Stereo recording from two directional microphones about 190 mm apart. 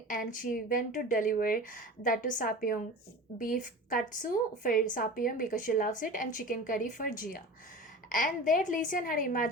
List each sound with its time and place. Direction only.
0.1 s a woman's voice: 45° left (ahead or behind)